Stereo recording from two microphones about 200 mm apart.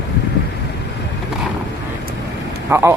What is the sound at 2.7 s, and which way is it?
Speech, 15° right (ahead or behind).